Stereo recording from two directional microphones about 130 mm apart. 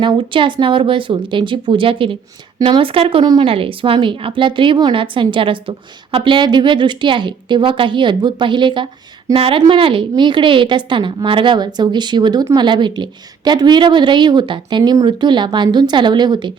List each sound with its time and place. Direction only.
0.0 s a woman's voice: 40° right (ahead or behind)